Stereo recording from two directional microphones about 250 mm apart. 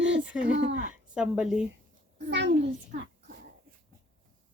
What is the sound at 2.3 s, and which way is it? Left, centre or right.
Speech, right.